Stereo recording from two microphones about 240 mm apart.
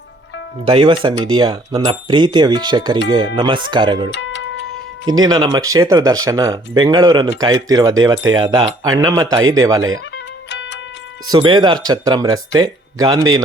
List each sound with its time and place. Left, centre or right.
0.6 s speech: right
4.1 s tick-tock: left
5.0 s speech: centre
10.5 s music: left
11.3 s speech: centre